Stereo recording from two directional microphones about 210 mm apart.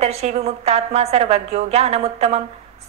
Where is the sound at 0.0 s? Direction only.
30° right (ahead or behind).